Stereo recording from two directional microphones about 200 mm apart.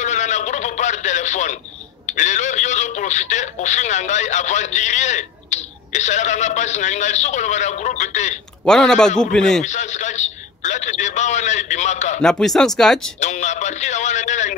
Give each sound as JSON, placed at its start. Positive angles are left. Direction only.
{"t": 0.0, "sound": "radio", "side_deg": 35}
{"t": 2.0, "sound": "speech", "side_deg": 35}
{"t": 8.6, "sound": "speech", "side_deg": 5}
{"t": 9.6, "sound": "speech", "side_deg": 35}
{"t": 12.2, "sound": "speech", "side_deg": 5}
{"t": 13.2, "sound": "speech", "side_deg": 35}